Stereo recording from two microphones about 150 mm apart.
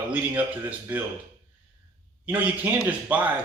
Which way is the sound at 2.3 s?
10° right (ahead or behind).